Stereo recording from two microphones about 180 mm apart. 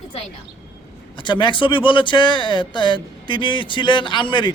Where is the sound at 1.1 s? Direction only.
25° left (ahead or behind).